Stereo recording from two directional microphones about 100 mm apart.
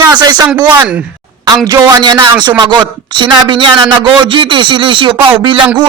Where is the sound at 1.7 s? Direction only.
35° right (ahead or behind); by 5.6 s 60° right (ahead or behind).